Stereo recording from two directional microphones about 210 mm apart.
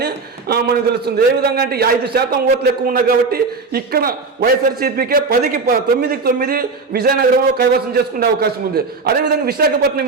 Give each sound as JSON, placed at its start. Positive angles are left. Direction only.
{"t": 0.0, "sound": "a man's voice", "side_deg": -50}